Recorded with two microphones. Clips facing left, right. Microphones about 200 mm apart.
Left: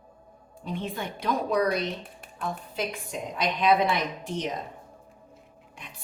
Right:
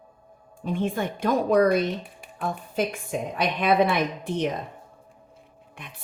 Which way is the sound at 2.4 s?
50° right (ahead or behind).